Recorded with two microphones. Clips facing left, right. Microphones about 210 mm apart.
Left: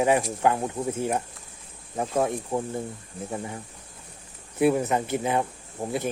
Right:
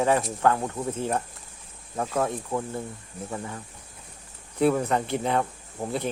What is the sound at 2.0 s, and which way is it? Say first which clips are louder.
Speech: left 2 dB; 25° left (ahead or behind).